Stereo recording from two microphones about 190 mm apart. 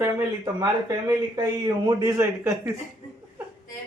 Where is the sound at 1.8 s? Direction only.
15° right (ahead or behind).